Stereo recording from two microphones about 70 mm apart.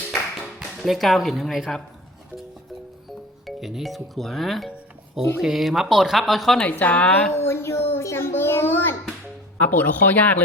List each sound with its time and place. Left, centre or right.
0.6 s speech: centre
3.4 s speech: centre
6.6 s speech: left
7.3 s a child's voice: left